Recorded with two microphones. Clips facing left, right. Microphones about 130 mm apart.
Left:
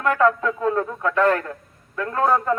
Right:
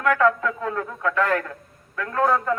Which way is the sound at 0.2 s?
25° left (ahead or behind).